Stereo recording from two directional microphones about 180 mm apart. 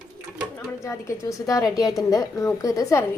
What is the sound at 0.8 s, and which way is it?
A woman's voice, 15° left (ahead or behind).